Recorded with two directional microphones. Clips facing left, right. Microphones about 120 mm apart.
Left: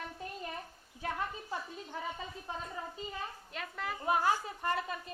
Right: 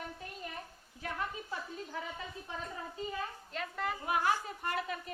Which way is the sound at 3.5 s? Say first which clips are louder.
Right 4 dB; centre (ahead or behind).